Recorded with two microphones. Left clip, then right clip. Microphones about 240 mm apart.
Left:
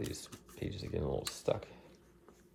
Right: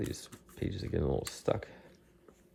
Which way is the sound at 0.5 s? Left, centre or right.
Right.